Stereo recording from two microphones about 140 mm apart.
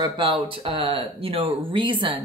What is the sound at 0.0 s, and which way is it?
A woman's voice, 35° right (ahead or behind).